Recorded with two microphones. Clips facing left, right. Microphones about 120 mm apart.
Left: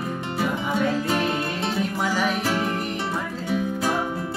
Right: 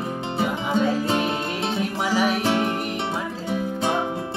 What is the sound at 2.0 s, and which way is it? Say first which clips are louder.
Music: right 4 dB; 5° right (ahead or behind).